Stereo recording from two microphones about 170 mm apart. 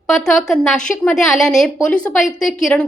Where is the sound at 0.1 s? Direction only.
Centre (ahead or behind).